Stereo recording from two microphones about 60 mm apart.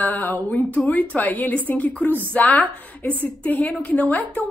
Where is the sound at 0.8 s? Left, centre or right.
Left.